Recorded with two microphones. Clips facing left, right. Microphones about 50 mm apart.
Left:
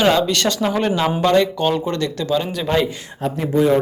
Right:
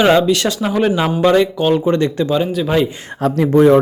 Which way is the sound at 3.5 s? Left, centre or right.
Right.